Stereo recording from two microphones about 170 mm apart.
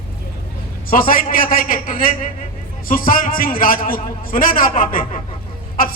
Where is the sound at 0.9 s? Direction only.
55° left (ahead or behind).